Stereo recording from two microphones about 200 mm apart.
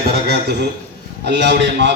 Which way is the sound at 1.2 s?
55° right (ahead or behind).